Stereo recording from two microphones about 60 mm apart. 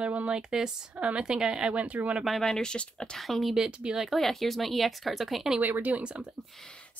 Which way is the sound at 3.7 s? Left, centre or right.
Centre.